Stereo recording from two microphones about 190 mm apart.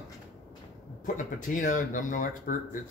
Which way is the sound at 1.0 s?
45° left (ahead or behind).